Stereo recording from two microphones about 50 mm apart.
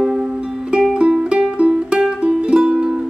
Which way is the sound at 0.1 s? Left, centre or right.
Centre.